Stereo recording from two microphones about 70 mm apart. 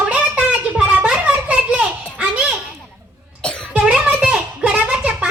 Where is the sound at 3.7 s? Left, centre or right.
Centre.